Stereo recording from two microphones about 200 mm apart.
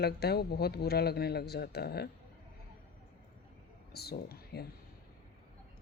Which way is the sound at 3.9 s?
50° left (ahead or behind).